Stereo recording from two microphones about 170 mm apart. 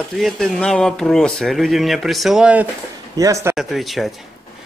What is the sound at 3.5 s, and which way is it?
Speech, centre (ahead or behind).